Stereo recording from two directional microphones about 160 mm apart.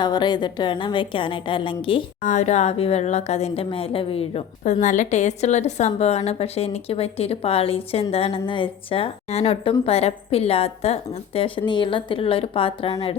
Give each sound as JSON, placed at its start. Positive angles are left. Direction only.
{"t": 0.0, "sound": "a woman's voice", "side_deg": 25}
{"t": 2.2, "sound": "a woman's voice", "side_deg": 50}